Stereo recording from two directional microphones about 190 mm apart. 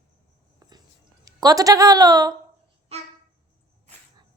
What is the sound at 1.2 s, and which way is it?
A woman's voice, 20° right (ahead or behind).